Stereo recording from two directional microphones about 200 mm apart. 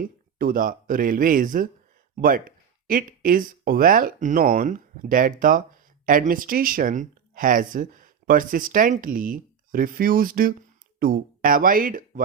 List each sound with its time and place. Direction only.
0.0 s speech: 45° right (ahead or behind)